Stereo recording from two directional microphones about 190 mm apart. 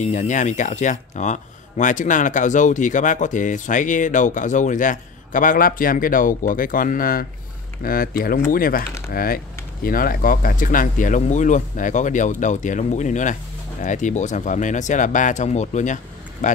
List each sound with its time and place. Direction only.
0.0 s speech: 40° left (ahead or behind)